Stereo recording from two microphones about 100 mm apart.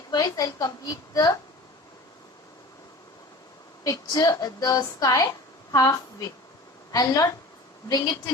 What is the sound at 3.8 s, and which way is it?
A woman's voice, 35° left (ahead or behind).